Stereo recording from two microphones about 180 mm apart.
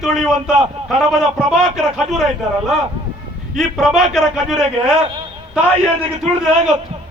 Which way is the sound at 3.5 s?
Centre (ahead or behind).